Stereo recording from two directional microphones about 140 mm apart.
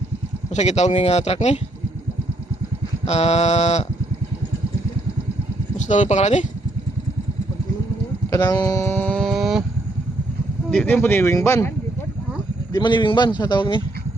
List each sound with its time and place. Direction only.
0.5 s speech: 55° left (ahead or behind)
3.1 s speech: 50° left (ahead or behind)
5.7 s speech: 60° left (ahead or behind)
8.3 s speech: 25° left (ahead or behind); by 9.6 s centre (ahead or behind)
10.7 s speech: 5° left (ahead or behind)
12.7 s speech: 35° left (ahead or behind)